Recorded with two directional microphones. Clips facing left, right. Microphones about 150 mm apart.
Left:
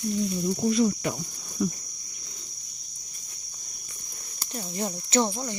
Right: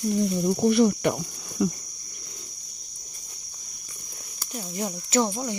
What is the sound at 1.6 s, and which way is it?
Cricket, 90° right.